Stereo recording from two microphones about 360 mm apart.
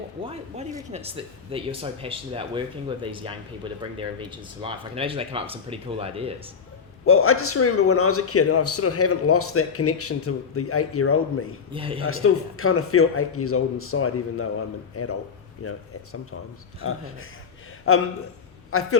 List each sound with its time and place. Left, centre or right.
0.2 s speech: centre
7.0 s a man's voice: left
11.7 s speech: centre
12.0 s a man's voice: left
16.8 s a man's voice: left